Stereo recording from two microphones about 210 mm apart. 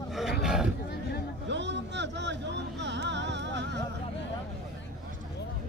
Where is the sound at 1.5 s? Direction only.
55° right (ahead or behind).